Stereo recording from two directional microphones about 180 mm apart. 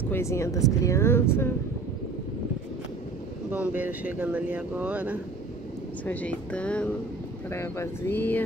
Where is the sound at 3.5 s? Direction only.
10° right (ahead or behind).